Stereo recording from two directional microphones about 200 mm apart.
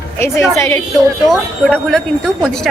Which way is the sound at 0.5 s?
15° left (ahead or behind).